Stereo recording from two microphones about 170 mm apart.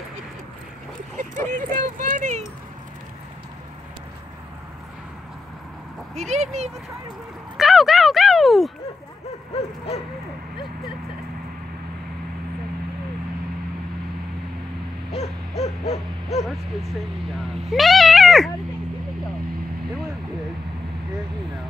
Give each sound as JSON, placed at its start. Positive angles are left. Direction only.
{"t": 1.1, "sound": "a sound", "side_deg": -45}
{"t": 6.1, "sound": "speech", "side_deg": -40}
{"t": 7.5, "sound": "a sound", "side_deg": 0}
{"t": 15.1, "sound": "hoot", "side_deg": 40}
{"t": 15.9, "sound": "owl", "side_deg": 40}
{"t": 17.6, "sound": "speech", "side_deg": 0}